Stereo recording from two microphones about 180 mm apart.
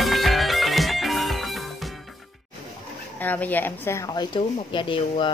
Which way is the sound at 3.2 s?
10° left (ahead or behind).